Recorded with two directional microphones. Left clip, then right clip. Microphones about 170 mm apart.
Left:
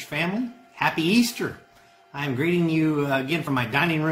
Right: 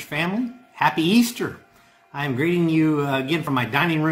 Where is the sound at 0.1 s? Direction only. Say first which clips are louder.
Right 2 dB; 20° right (ahead or behind).